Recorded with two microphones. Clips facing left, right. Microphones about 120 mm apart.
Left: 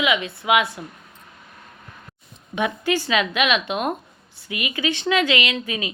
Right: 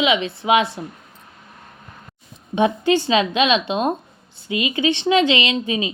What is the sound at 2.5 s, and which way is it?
A woman's voice, 25° right (ahead or behind).